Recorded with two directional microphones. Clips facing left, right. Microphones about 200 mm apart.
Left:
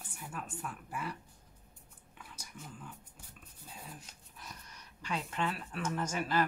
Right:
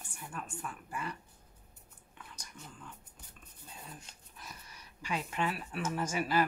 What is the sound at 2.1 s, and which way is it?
Whispering, 5° left (ahead or behind).